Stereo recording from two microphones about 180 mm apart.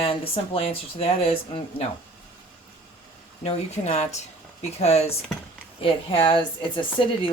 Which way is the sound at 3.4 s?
35° left (ahead or behind).